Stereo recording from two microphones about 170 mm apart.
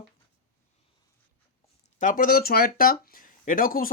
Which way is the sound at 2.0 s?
55° left (ahead or behind).